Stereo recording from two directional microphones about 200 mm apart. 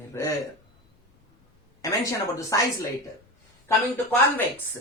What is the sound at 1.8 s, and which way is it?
A woman's voice, 15° left (ahead or behind).